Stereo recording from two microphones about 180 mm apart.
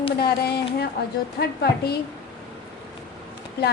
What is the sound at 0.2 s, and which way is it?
A woman's voice, 65° left (ahead or behind).